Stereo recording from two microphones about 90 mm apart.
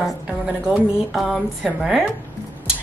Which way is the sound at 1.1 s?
Centre (ahead or behind).